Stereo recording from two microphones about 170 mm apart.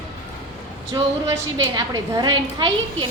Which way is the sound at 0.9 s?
20° right (ahead or behind).